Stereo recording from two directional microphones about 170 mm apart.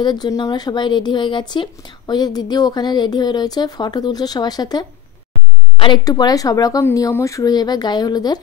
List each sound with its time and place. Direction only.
0.0 s speech: 25° left (ahead or behind)